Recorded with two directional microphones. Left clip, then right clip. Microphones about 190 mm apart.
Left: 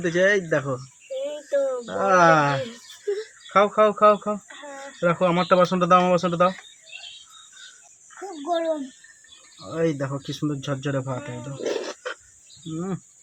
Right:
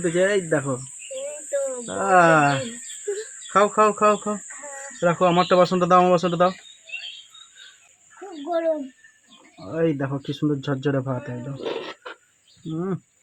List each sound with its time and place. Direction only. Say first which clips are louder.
0.0 s speech: left 1 dB; 35° right (ahead or behind)
1.5 s a sound: left 3 dB; 30° left (ahead or behind)
1.9 s speech: right 1 dB; 30° right (ahead or behind)
3.1 s insect: left 2 dB; 30° left (ahead or behind)
3.5 s speech: even; 35° right (ahead or behind)
8.4 s a sound: right 1 dB; 5° right (ahead or behind)
9.6 s speech: right 1 dB; 45° right (ahead or behind)
11.7 s wild animals: left 3 dB; 10° right (ahead or behind)
12.7 s speech: right 3 dB; 35° right (ahead or behind)